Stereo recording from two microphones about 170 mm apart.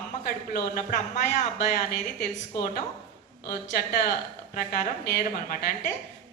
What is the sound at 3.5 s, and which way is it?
A woman's voice, 55° left (ahead or behind).